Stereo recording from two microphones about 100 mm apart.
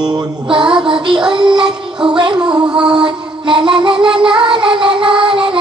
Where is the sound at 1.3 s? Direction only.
50° right (ahead or behind).